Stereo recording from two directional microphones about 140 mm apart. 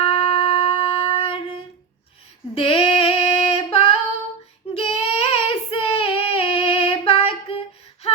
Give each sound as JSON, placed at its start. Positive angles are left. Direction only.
{"t": 0.0, "sound": "wind instrument", "side_deg": 45}
{"t": 2.6, "sound": "female singing", "side_deg": 40}
{"t": 4.7, "sound": "child singing", "side_deg": 45}